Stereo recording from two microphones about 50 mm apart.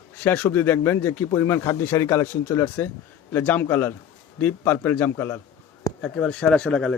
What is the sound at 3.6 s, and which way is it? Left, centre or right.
Speech, left.